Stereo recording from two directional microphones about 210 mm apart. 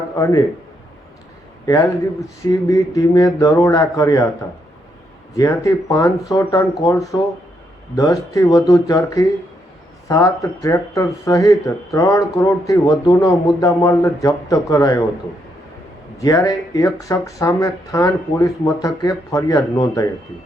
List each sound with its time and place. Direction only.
0.2 s speech: 15° left (ahead or behind)
1.6 s a man's voice: 15° left (ahead or behind)
5.3 s speech: 15° left (ahead or behind)
16.1 s speech: 15° left (ahead or behind)